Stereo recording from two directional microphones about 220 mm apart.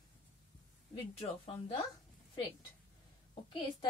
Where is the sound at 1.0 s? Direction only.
25° left (ahead or behind).